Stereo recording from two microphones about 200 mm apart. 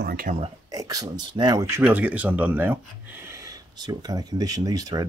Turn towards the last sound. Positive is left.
turn(degrees=-20)  # may be behind; listen again after turning